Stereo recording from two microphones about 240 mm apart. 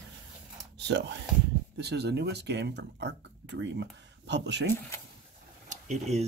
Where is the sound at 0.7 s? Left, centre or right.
Right.